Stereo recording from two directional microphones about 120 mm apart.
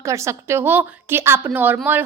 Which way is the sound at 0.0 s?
25° right (ahead or behind).